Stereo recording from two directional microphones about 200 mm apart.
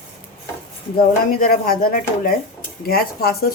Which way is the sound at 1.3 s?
50° left (ahead or behind).